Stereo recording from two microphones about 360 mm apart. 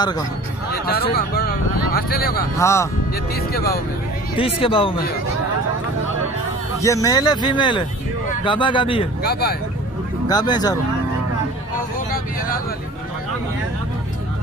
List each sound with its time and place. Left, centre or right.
0.8 s speech: left
2.5 s speech: centre
3.3 s speech: left
4.4 s speech: centre
6.8 s speech: centre
9.2 s speech: left
10.2 s speech: centre